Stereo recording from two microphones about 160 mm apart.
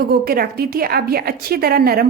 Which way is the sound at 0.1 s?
70° right (ahead or behind).